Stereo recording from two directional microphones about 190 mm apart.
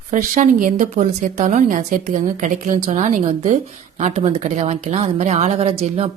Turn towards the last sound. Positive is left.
turn(degrees=-30)  # may be behind; listen again after turning